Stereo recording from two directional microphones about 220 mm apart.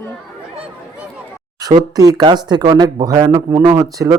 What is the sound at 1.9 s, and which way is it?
Speech, 15° right (ahead or behind).